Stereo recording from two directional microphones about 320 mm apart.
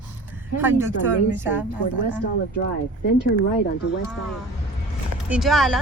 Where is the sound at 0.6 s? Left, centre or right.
Centre.